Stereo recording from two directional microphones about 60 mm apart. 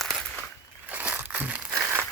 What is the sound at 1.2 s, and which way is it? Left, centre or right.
Crumpling, right.